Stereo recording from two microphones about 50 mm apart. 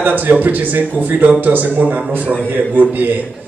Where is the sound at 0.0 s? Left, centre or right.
Right.